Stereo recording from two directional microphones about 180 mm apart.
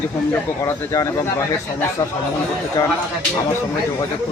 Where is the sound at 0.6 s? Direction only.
15° left (ahead or behind).